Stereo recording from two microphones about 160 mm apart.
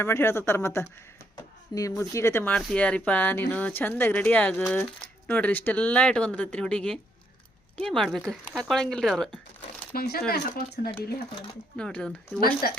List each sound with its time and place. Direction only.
0.0 s speech: 15° left (ahead or behind)
9.9 s speech: 75° left (ahead or behind)
11.8 s speech: 5° left (ahead or behind)
12.4 s speech: 70° left (ahead or behind)